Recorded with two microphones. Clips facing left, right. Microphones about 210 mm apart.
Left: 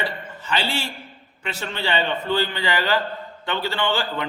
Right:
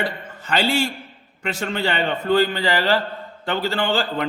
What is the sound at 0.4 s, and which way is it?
A man's voice, 45° right (ahead or behind).